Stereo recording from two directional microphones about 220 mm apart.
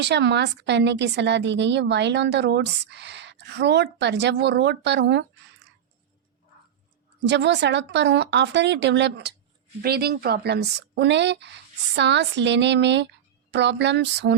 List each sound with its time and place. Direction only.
0.0 s a woman's voice: 50° right (ahead or behind)
7.3 s a woman's voice: 55° right (ahead or behind)